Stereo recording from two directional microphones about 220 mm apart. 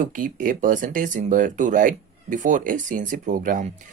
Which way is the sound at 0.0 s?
35° right (ahead or behind).